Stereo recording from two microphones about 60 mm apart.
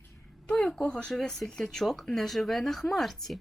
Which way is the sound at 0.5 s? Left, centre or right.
Centre.